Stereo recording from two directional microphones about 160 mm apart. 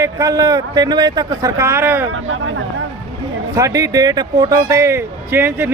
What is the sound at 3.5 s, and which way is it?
Speech, 20° right (ahead or behind).